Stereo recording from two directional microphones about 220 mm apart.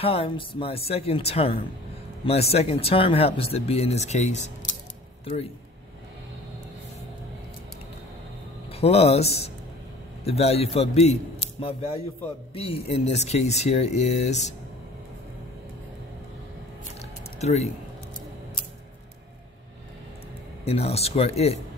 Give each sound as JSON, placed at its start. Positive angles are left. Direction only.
{"t": 0.0, "sound": "speech", "side_deg": 25}
{"t": 8.7, "sound": "speech", "side_deg": 30}
{"t": 17.4, "sound": "speech", "side_deg": 30}
{"t": 20.6, "sound": "speech", "side_deg": 25}